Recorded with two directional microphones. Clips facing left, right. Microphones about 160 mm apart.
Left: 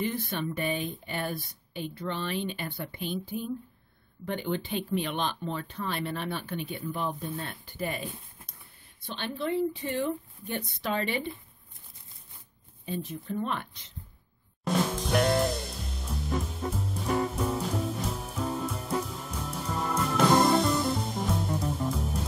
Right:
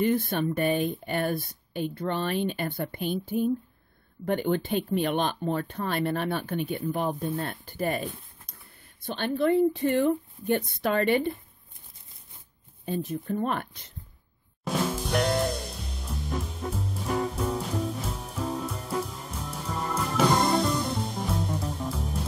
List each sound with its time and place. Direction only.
0.0 s speech: 50° right (ahead or behind)
9.0 s speech: 50° right (ahead or behind)
12.8 s speech: 45° right (ahead or behind)
14.6 s music: centre (ahead or behind)